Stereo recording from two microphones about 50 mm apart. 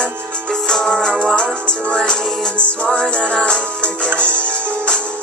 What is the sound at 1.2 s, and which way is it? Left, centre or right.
Music, left.